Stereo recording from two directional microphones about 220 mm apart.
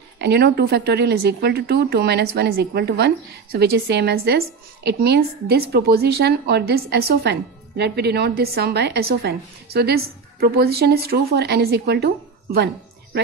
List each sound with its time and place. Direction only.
0.2 s speech: 50° right (ahead or behind)